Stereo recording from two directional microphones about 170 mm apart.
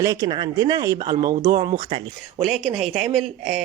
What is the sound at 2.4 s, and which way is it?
Speech, centre (ahead or behind).